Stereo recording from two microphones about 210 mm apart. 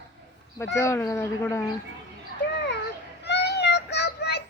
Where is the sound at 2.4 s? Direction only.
55° left (ahead or behind).